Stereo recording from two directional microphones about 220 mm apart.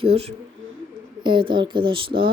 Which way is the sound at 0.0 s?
25° right (ahead or behind).